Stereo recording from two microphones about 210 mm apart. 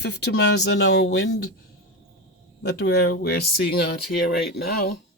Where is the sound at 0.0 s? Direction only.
55° left (ahead or behind).